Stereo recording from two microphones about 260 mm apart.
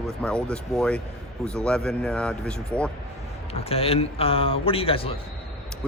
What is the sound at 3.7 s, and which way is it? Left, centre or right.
A man's voice, left.